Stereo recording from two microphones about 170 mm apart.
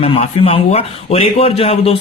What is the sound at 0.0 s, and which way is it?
Speech, 35° left (ahead or behind).